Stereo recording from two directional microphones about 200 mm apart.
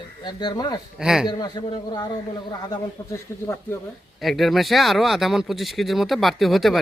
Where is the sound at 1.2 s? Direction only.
20° left (ahead or behind).